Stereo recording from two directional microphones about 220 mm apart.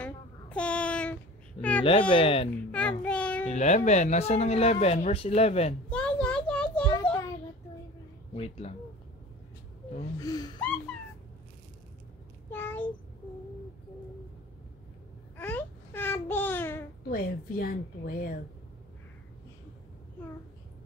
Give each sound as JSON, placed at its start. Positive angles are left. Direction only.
{"t": 0.0, "sound": "child singing", "side_deg": 5}
{"t": 1.6, "sound": "speech", "side_deg": 25}
{"t": 2.7, "sound": "child singing", "side_deg": 5}
{"t": 3.4, "sound": "speech", "side_deg": 30}
{"t": 5.9, "sound": "a sound", "side_deg": 5}
{"t": 8.4, "sound": "speech", "side_deg": 30}
{"t": 10.2, "sound": "speech", "side_deg": 20}
{"t": 12.4, "sound": "a sound", "side_deg": 10}
{"t": 15.3, "sound": "babbling", "side_deg": 10}
{"t": 17.1, "sound": "a woman's voice", "side_deg": 45}